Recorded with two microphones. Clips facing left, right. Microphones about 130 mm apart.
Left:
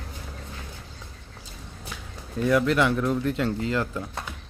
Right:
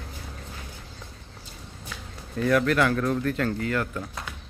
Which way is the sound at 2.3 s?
15° left (ahead or behind).